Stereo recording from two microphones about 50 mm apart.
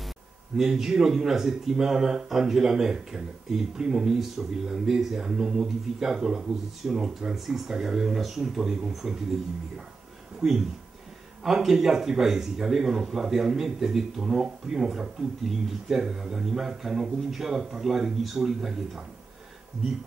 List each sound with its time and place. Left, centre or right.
0.6 s speech: centre
10.4 s speech: centre